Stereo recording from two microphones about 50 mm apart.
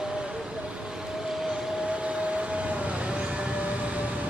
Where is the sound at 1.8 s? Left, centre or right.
Right.